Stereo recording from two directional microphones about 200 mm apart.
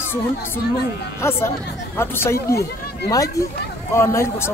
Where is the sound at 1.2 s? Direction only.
15° left (ahead or behind).